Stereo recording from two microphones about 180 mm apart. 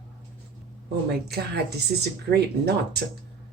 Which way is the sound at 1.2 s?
65° right (ahead or behind).